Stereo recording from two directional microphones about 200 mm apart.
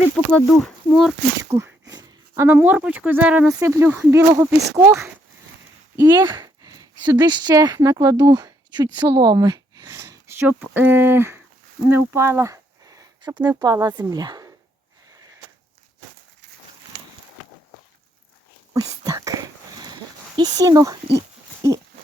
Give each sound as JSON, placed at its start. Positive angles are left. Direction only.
{"t": 0.3, "sound": "speech", "side_deg": 5}
{"t": 1.4, "sound": "speech", "side_deg": -15}
{"t": 6.0, "sound": "sigh", "side_deg": -10}
{"t": 7.0, "sound": "speech", "side_deg": -20}
{"t": 18.7, "sound": "a sound", "side_deg": -15}